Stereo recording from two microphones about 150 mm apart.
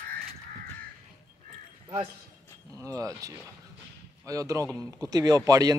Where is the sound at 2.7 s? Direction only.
20° right (ahead or behind).